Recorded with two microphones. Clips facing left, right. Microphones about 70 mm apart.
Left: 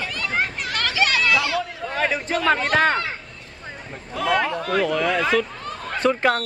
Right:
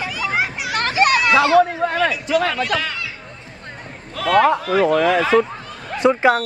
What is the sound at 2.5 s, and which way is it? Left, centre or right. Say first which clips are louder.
Speech: left 4 dB; left.